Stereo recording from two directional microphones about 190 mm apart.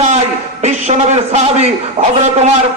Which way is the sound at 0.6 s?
35° right (ahead or behind).